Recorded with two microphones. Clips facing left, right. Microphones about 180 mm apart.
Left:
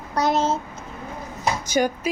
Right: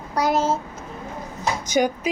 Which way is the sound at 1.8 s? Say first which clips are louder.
Right 1 dB; 10° right (ahead or behind).